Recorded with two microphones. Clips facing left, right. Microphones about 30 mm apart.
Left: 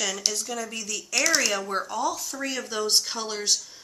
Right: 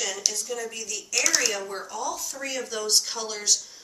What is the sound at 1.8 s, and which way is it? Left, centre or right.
Speech, left.